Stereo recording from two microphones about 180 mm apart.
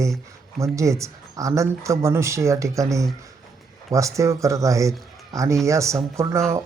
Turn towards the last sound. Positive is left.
turn(degrees=-15)  # may be behind; listen again after turning